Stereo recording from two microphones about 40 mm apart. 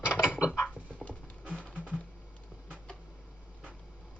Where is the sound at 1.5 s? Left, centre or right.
Left.